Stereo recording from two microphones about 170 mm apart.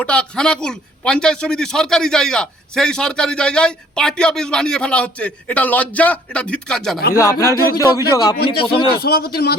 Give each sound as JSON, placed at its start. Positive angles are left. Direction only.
{"t": 0.0, "sound": "a man's voice", "side_deg": 5}
{"t": 7.2, "sound": "speech", "side_deg": 15}
{"t": 9.0, "sound": "speech", "side_deg": 65}